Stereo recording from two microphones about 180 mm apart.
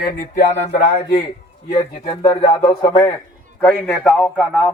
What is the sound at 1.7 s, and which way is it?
Speech, 35° left (ahead or behind).